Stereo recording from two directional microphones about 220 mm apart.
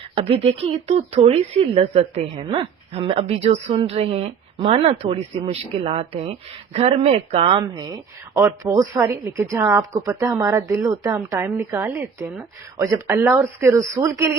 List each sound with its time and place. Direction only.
0.2 s a woman's voice: 25° right (ahead or behind)
7.6 s a woman's voice: 15° right (ahead or behind)